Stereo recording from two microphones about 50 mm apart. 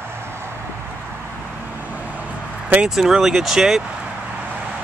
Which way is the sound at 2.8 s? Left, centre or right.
Centre.